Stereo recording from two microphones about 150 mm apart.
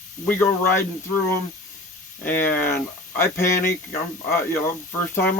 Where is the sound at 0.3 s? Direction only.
15° left (ahead or behind).